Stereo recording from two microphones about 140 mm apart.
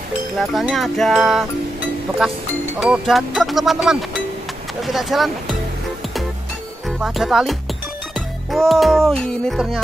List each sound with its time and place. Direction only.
0.4 s music: centre (ahead or behind)
2.8 s music: centre (ahead or behind)
7.0 s music: centre (ahead or behind)